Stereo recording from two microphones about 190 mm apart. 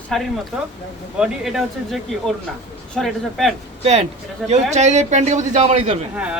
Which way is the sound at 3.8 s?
35° right (ahead or behind).